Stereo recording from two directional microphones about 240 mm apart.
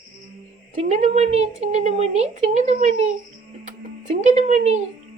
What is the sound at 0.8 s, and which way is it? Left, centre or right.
Speech, right.